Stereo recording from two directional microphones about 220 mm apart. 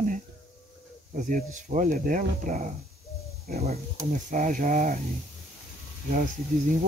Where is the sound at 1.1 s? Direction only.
35° right (ahead or behind).